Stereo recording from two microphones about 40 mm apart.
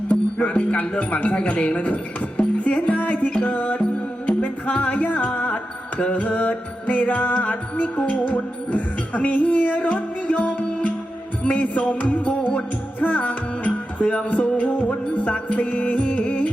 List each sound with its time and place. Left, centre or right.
0.1 s speech: left
2.6 s music: left
6.0 s mantra: left
6.2 s music: left